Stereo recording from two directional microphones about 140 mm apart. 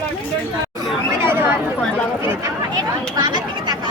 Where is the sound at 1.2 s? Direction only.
15° right (ahead or behind).